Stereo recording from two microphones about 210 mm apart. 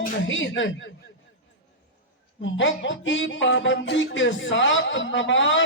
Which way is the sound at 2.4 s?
60° left (ahead or behind).